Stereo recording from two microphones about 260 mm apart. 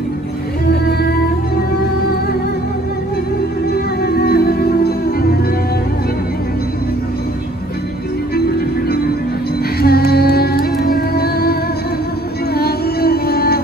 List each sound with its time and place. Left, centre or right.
3.7 s music: left
8.5 s music: left
12.5 s music: left